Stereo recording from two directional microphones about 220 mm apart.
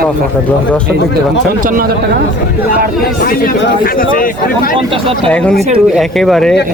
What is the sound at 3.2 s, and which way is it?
Speech, 40° left (ahead or behind).